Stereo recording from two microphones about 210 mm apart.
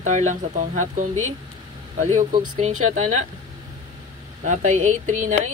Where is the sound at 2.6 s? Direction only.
35° right (ahead or behind).